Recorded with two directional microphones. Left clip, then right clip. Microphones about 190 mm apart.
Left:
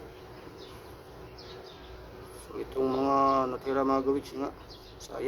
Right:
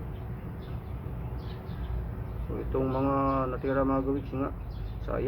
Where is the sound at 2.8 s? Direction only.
55° left (ahead or behind).